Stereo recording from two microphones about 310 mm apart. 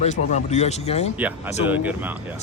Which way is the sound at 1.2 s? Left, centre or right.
Centre.